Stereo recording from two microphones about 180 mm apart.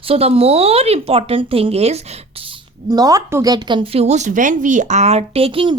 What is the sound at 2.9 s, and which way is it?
Speech, 20° right (ahead or behind).